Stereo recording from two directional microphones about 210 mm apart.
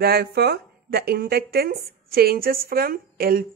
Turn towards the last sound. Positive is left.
turn(degrees=-45)  # may be behind; listen again after turning